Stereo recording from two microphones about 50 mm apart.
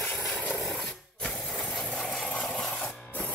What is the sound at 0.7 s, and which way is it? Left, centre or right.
Sewing machine, centre.